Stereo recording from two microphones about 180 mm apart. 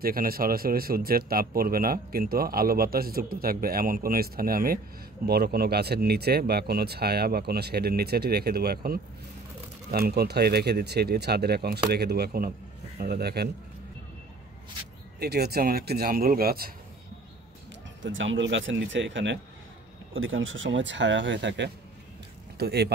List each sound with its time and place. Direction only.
0.0 s speech: 55° right (ahead or behind)
15.1 s speech: 60° right (ahead or behind)
18.0 s speech: 90° right
22.6 s speech: 65° right (ahead or behind)